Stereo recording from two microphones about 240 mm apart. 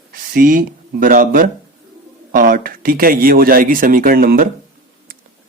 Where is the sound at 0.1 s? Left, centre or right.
Right.